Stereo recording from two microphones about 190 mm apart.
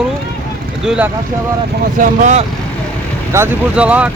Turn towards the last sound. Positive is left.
turn(degrees=-5)  # may be behind; listen again after turning